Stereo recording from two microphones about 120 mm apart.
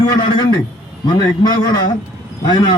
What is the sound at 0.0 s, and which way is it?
A man's voice, 35° left (ahead or behind).